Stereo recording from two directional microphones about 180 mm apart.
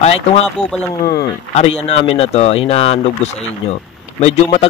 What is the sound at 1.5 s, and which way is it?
Speech, 35° left (ahead or behind).